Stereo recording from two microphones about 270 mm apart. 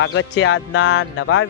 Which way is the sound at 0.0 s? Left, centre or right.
Left.